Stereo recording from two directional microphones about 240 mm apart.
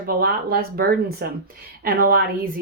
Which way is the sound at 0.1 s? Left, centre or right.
Right.